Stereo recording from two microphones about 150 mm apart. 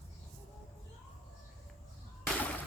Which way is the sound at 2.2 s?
10° left (ahead or behind).